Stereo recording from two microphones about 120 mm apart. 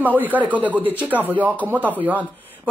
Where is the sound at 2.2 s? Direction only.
15° left (ahead or behind).